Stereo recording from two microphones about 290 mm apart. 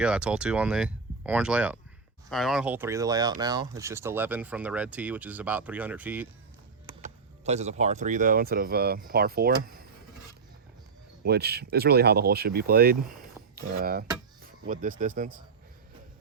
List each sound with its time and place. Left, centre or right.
0.0 s speech: centre
7.0 s speech: right
11.2 s speech: right